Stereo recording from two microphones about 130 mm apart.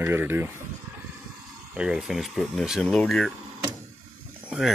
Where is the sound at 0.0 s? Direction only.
15° right (ahead or behind).